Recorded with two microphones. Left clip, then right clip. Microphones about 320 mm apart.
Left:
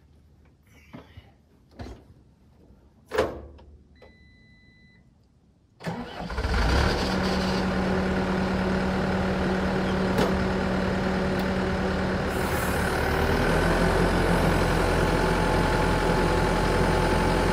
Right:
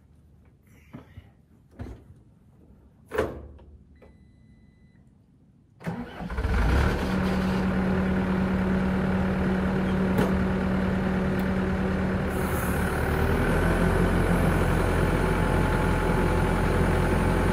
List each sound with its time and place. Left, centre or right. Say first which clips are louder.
3.1 s power windows: left 2 dB; left
5.8 s vehicle: left 2 dB; left